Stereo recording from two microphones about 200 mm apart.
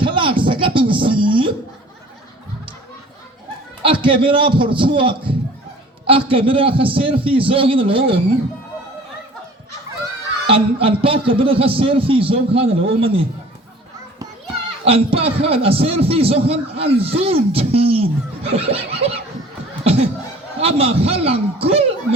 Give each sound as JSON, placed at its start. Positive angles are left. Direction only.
{"t": 0.0, "sound": "a sound", "side_deg": -25}
{"t": 3.8, "sound": "a man's voice", "side_deg": -25}
{"t": 10.5, "sound": "a man's voice", "side_deg": -25}
{"t": 14.8, "sound": "a man's voice", "side_deg": -30}
{"t": 19.8, "sound": "a sound", "side_deg": -30}
{"t": 20.6, "sound": "a man's voice", "side_deg": -30}